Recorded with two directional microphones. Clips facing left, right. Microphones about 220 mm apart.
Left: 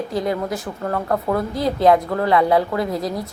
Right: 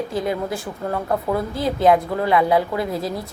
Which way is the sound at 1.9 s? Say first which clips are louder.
Left 1 dB; 20° right (ahead or behind).